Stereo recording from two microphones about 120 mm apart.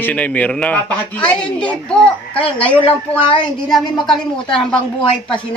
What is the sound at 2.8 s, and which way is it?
A woman's voice, 45° left (ahead or behind).